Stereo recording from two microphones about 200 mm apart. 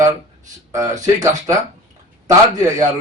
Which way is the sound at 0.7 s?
15° right (ahead or behind).